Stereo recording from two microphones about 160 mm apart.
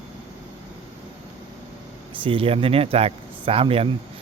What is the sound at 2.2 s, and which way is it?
Speech, 35° right (ahead or behind).